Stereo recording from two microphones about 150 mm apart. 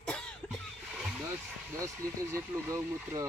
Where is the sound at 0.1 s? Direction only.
5° left (ahead or behind).